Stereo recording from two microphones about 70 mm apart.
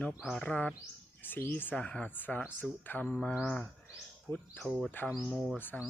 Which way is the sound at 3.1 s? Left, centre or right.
Centre.